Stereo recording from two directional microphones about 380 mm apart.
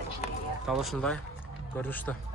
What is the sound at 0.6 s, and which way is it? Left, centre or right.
Speech, centre.